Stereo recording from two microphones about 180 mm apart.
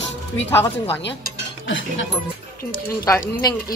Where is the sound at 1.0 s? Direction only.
85° left.